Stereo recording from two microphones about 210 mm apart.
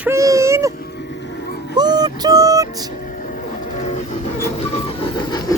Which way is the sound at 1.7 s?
20° right (ahead or behind).